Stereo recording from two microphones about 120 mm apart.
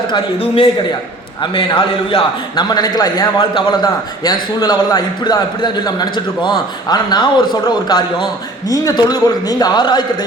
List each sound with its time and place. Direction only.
0.3 s a man's voice: 45° left (ahead or behind)